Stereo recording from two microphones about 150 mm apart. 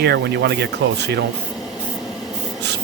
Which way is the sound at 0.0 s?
90° right.